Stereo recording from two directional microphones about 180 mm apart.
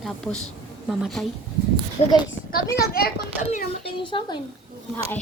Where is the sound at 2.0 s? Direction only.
35° left (ahead or behind).